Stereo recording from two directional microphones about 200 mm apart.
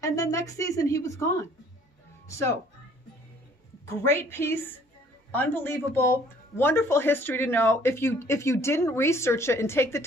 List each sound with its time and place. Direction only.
0.0 s speech: 15° left (ahead or behind)
3.9 s speech: 10° left (ahead or behind)